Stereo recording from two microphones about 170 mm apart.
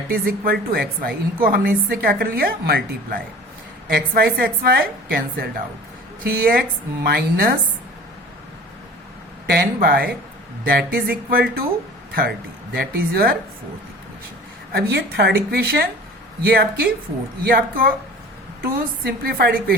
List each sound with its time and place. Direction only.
0.1 s a woman's voice: 65° right (ahead or behind)
9.5 s a woman's voice: 65° right (ahead or behind)
12.7 s a woman's voice: 65° right (ahead or behind)
14.7 s a woman's voice: 70° right (ahead or behind)
18.6 s a woman's voice: 65° right (ahead or behind)